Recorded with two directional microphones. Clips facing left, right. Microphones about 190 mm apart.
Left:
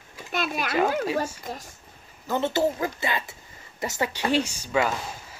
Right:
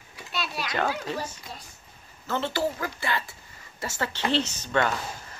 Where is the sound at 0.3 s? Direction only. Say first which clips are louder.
Left 5 dB; 50° left (ahead or behind).